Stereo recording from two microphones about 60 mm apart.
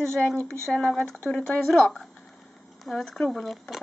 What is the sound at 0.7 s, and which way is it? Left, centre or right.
A child's voice, centre.